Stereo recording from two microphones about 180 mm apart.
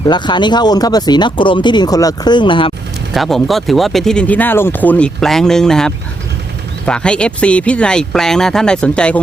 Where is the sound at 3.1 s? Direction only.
Centre (ahead or behind).